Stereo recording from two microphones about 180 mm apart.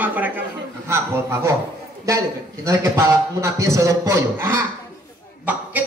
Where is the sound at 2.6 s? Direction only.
15° right (ahead or behind).